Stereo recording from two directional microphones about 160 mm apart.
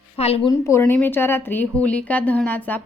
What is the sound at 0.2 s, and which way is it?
Speech, 40° left (ahead or behind).